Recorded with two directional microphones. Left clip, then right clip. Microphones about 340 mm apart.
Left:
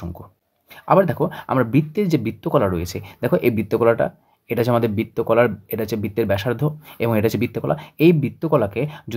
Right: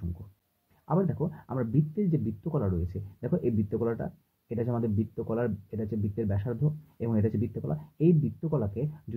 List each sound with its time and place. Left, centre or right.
0.8 s speech: left